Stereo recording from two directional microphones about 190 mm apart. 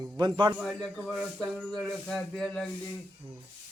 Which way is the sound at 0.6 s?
Centre (ahead or behind).